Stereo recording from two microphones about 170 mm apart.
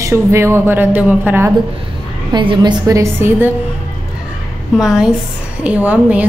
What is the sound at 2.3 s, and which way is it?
A woman's voice, 25° right (ahead or behind).